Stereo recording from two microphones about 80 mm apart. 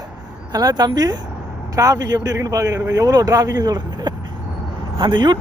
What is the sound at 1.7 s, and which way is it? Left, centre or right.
Speech, right.